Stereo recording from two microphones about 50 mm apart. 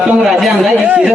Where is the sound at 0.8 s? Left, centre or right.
Right.